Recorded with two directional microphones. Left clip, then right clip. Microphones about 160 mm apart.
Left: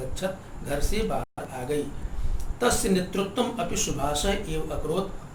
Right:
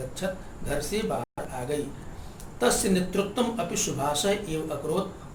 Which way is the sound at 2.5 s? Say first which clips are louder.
Even; 20° right (ahead or behind).